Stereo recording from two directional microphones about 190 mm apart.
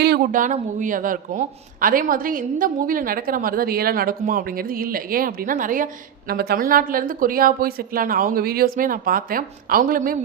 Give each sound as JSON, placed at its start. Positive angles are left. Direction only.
{"t": 0.0, "sound": "a woman's voice", "side_deg": -55}